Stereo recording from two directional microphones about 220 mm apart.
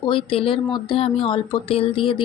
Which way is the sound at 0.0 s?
25° left (ahead or behind).